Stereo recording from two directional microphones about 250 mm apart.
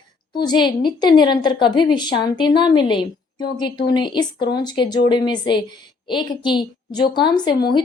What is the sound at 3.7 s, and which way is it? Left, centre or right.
Speech, left.